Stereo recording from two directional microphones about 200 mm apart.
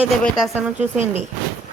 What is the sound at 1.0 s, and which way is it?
Speech, 35° right (ahead or behind).